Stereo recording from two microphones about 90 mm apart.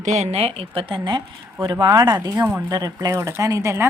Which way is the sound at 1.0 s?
55° right (ahead or behind).